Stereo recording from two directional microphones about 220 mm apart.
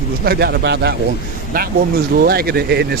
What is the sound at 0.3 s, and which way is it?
Speech, 45° right (ahead or behind).